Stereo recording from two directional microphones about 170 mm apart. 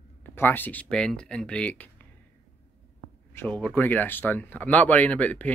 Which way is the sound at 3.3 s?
10° left (ahead or behind).